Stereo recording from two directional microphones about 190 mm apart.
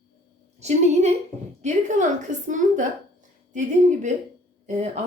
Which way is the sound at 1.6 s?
40° right (ahead or behind).